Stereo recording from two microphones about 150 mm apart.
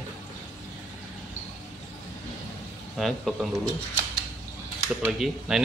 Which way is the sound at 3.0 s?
Centre (ahead or behind).